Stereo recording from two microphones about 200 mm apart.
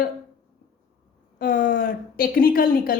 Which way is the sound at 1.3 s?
45° left (ahead or behind).